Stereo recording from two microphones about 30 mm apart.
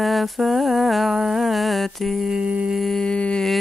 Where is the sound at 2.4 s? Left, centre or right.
Right.